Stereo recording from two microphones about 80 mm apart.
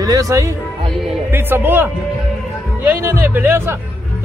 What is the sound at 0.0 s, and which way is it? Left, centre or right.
Speech, right.